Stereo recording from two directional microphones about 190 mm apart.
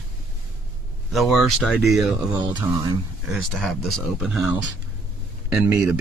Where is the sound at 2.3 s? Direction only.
20° right (ahead or behind).